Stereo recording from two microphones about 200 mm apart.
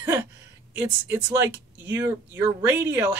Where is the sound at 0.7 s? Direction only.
15° right (ahead or behind).